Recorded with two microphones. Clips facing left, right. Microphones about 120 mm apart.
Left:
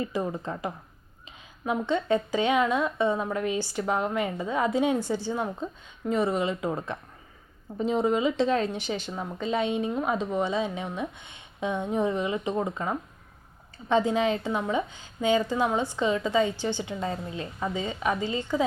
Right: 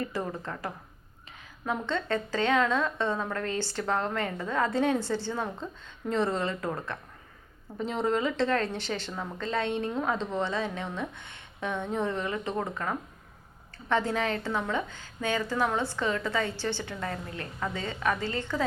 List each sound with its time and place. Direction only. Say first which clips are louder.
0.0 s a woman's voice: left 3 dB; 15° left (ahead or behind)